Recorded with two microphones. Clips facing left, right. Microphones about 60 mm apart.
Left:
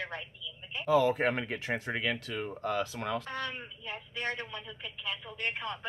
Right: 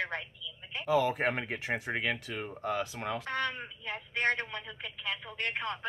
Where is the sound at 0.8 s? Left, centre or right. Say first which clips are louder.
Left 2 dB; centre.